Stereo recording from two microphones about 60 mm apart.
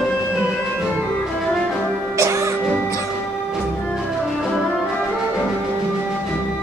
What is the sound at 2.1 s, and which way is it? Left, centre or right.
Music, right.